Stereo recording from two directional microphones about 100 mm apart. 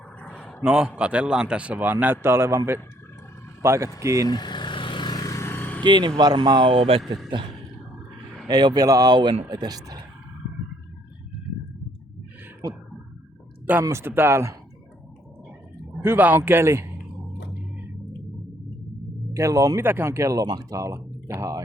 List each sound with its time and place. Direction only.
0.2 s a sound: 15° left (ahead or behind)
0.6 s speech: 10° right (ahead or behind); by 2.6 s 25° right (ahead or behind)
3.6 s speech: 30° right (ahead or behind)
4.3 s vehicle: 45° left (ahead or behind); by 5.8 s 20° left (ahead or behind)
5.8 s speech: 50° right (ahead or behind); by 7.0 s 65° right (ahead or behind)
8.4 s speech: 40° right (ahead or behind)
13.8 s speech: 25° right (ahead or behind)
16.0 s a man's voice: 20° right (ahead or behind)
19.3 s speech: 30° right (ahead or behind)